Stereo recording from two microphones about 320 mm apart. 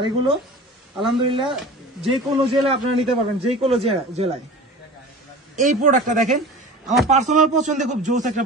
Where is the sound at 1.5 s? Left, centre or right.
Centre.